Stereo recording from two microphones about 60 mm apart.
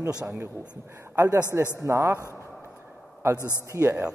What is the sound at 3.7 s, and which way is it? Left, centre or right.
Speech, right.